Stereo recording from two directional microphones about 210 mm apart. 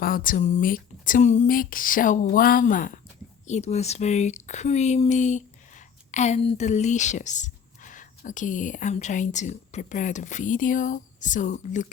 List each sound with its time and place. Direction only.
0.0 s speech: 40° left (ahead or behind)